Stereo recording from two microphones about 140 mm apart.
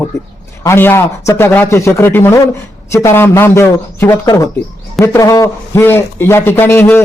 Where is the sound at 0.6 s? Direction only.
20° left (ahead or behind).